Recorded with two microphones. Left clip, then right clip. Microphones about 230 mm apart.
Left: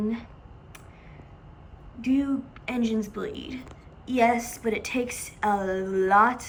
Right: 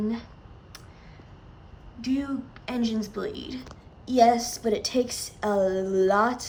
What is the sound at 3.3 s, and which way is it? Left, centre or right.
Speech, right.